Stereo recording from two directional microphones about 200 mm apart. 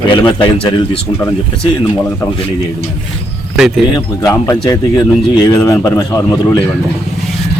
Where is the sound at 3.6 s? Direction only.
5° right (ahead or behind).